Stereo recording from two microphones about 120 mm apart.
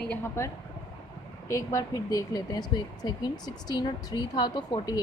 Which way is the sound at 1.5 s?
30° left (ahead or behind).